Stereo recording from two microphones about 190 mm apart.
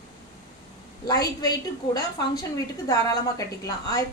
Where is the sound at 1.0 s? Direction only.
20° left (ahead or behind).